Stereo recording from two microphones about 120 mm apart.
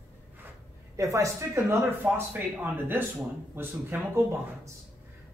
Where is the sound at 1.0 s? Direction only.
25° right (ahead or behind).